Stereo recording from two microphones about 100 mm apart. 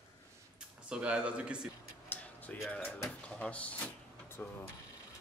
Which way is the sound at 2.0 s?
15° left (ahead or behind).